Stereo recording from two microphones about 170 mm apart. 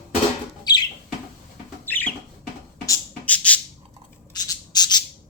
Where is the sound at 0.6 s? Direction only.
25° left (ahead or behind).